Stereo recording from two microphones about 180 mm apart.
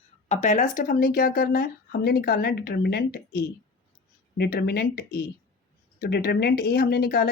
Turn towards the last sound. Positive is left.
turn(degrees=60)  # may be behind; listen again after turning